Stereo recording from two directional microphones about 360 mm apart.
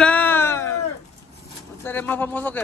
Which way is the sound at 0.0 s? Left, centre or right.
Centre.